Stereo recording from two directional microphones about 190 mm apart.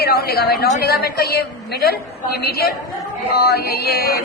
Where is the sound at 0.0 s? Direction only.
55° left (ahead or behind).